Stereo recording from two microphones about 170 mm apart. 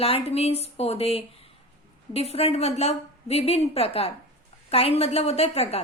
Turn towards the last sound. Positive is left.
turn(degrees=35)  # may be behind; listen again after turning